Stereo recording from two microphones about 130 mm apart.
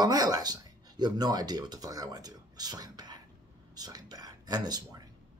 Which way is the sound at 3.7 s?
30° right (ahead or behind).